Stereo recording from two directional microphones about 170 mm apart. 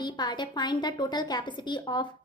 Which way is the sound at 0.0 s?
25° left (ahead or behind).